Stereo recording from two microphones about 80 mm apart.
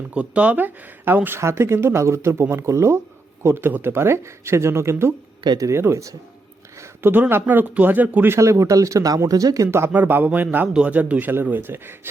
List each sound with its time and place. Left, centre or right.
0.1 s speech: centre; by 6.1 s right
6.7 s a sound: right
7.1 s speech: right
8.4 s speech: right
9.9 s speech: right